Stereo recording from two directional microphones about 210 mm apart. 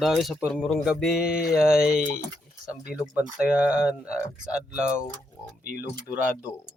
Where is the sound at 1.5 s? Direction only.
5° right (ahead or behind).